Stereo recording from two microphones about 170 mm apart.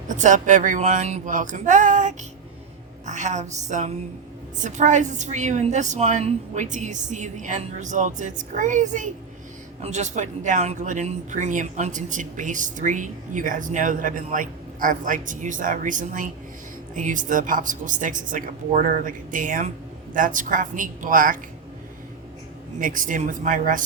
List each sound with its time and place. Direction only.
0.1 s speech: 45° right (ahead or behind)
22.8 s speech: 50° right (ahead or behind)